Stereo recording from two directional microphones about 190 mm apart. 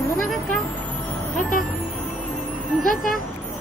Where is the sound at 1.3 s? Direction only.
45° left (ahead or behind).